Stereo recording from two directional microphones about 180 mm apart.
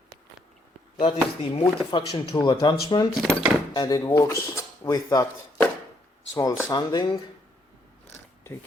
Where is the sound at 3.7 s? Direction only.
20° left (ahead or behind).